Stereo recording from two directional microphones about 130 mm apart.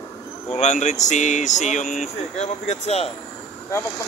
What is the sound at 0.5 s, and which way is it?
Speech, 65° left (ahead or behind).